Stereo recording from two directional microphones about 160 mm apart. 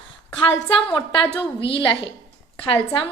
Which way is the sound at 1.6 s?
30° left (ahead or behind).